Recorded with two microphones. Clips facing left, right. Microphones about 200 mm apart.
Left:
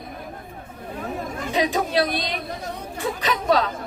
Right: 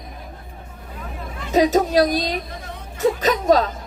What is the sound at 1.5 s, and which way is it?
A woman's voice, 40° right (ahead or behind).